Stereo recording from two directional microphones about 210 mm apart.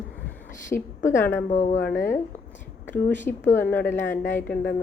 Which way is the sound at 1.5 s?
35° left (ahead or behind).